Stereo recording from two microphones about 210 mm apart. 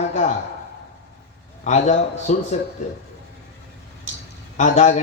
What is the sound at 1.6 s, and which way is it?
Speech, 35° left (ahead or behind).